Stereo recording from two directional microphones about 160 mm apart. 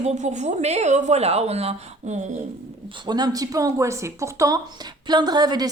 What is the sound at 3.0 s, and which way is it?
Speech, 25° right (ahead or behind).